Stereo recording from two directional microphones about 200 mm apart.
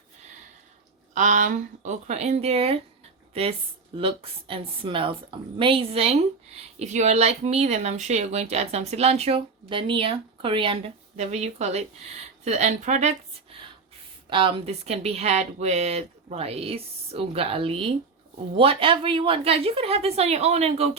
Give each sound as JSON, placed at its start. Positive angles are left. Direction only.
{"t": 1.1, "sound": "a woman's voice", "side_deg": -40}
{"t": 3.9, "sound": "a woman's voice", "side_deg": -25}